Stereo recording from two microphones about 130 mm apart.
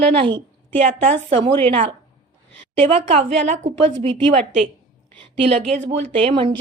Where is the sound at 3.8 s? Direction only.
40° right (ahead or behind).